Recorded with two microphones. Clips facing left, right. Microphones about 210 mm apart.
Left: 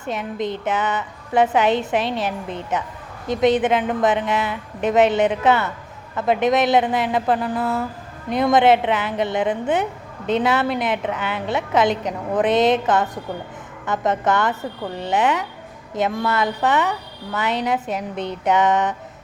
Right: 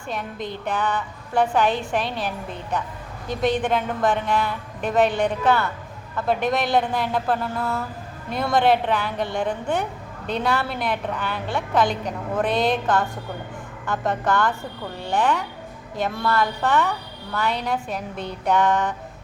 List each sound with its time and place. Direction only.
0.0 s a woman's voice: 20° left (ahead or behind)
7.5 s speech: centre (ahead or behind)
8.3 s a woman's voice: 20° left (ahead or behind)